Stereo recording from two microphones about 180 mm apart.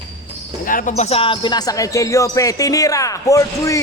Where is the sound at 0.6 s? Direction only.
50° left (ahead or behind).